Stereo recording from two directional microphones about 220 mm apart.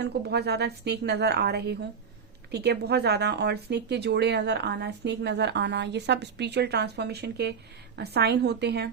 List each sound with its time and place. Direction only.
0.0 s speech: 50° right (ahead or behind)